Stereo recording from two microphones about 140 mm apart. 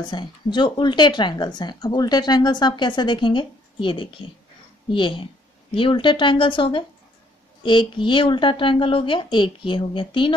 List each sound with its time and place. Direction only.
0.0 s speech: 35° left (ahead or behind)